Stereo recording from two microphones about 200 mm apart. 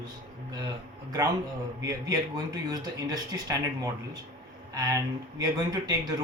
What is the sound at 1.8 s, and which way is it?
Speech, 15° right (ahead or behind).